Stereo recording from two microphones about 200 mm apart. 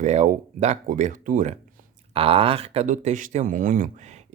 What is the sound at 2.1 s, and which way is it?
Speech, 30° right (ahead or behind).